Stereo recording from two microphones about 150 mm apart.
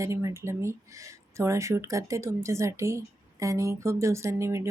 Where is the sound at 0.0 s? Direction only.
20° right (ahead or behind).